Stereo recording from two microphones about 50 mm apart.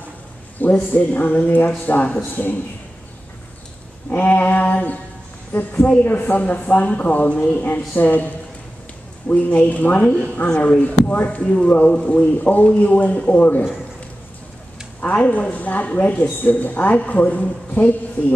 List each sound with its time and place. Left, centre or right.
0.6 s a man's voice: left
4.1 s a man's voice: left
10.5 s speech: centre
10.8 s speech: left
15.0 s a man's voice: left